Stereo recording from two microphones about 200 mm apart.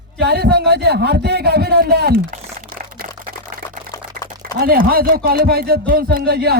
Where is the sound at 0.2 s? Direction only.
50° right (ahead or behind).